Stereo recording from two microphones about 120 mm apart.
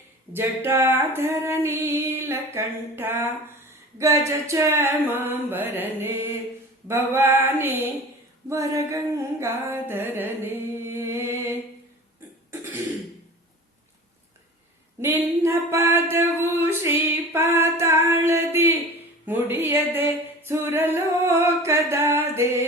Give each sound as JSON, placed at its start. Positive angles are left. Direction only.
{"t": 0.3, "sound": "female singing", "side_deg": -20}
{"t": 6.8, "sound": "a sound", "side_deg": -15}
{"t": 8.4, "sound": "female singing", "side_deg": -25}
{"t": 9.4, "sound": "music", "side_deg": -20}
{"t": 15.4, "sound": "singing", "side_deg": -20}